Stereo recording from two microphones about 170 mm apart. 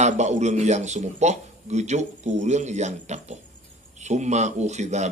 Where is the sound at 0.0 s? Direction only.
40° right (ahead or behind).